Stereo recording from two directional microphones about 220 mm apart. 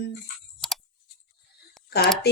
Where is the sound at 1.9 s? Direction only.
45° left (ahead or behind).